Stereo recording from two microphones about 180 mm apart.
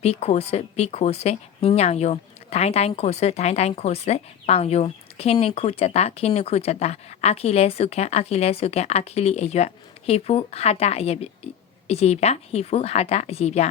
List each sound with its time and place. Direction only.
0.0 s speech: 35° left (ahead or behind)